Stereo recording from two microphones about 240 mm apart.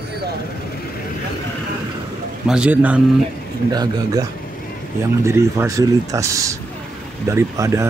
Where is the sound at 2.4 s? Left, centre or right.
Centre.